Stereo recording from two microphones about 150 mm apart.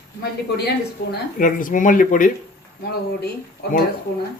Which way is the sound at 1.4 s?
65° left (ahead or behind).